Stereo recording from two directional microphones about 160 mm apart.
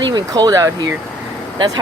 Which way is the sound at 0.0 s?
25° right (ahead or behind).